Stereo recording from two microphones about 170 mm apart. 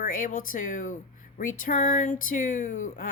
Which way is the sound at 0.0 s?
50° left (ahead or behind).